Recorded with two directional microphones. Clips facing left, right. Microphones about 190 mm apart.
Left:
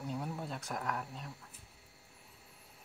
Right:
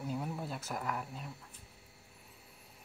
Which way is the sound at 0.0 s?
Centre (ahead or behind).